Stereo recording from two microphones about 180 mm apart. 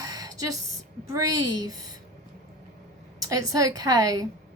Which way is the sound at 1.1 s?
20° right (ahead or behind).